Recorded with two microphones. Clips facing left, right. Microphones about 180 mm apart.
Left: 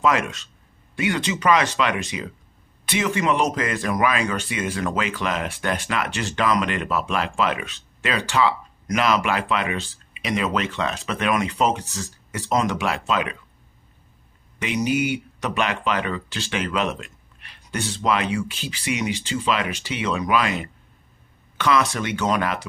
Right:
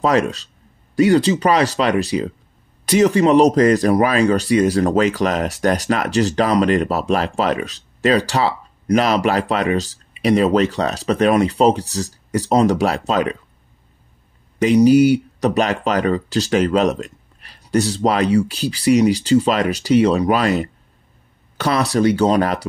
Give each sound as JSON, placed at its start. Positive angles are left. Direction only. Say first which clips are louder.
{"t": 0.0, "sound": "speech", "louder": "right 5 dB", "side_deg": -35}
{"t": 14.6, "sound": "speech", "louder": "right 12 dB", "side_deg": -35}